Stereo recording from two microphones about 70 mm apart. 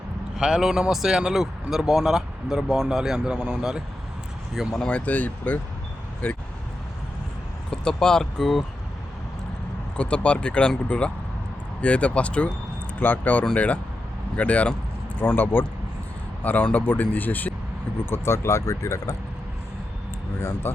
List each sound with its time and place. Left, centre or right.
0.3 s speech: centre
4.9 s speech: centre
7.7 s speech: centre
10.0 s speech: centre
18.0 s speech: left
20.4 s speech: left